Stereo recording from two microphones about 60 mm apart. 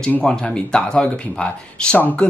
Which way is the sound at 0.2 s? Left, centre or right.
Centre.